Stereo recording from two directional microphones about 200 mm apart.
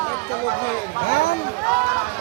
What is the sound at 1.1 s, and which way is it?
Speech, 55° left (ahead or behind).